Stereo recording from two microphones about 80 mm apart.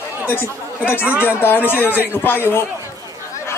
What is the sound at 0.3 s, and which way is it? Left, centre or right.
Speech, left.